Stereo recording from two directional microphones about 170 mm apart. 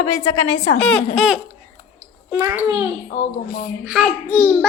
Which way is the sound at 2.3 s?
15° right (ahead or behind).